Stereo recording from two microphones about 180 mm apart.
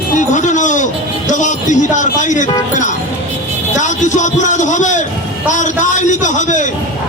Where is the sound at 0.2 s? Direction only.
45° left (ahead or behind).